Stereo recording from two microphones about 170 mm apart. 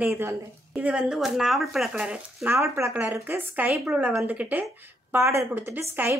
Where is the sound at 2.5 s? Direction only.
15° right (ahead or behind).